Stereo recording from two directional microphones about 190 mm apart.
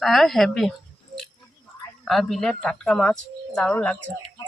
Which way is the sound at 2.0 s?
Centre (ahead or behind).